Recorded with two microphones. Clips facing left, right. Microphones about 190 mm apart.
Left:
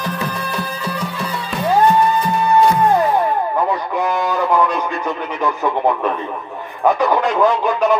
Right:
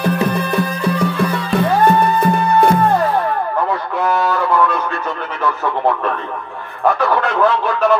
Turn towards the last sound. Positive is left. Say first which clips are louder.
# even
turn(degrees=15)  # may be behind; listen again after turning